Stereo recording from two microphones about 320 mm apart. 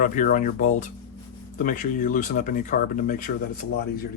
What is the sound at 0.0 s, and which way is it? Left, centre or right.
Speech, left.